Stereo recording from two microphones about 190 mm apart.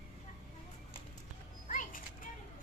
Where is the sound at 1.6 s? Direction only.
45° left (ahead or behind).